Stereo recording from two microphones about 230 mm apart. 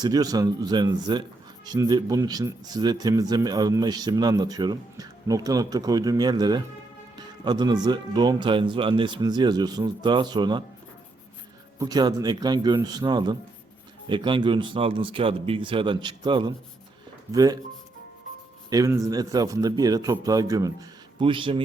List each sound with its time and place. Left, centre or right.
0.0 s speech: centre
11.8 s speech: centre
18.7 s speech: centre